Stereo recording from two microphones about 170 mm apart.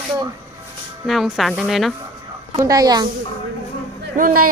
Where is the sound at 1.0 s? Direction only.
Centre (ahead or behind).